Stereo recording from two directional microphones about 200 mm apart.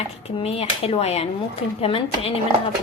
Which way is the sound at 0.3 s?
30° left (ahead or behind).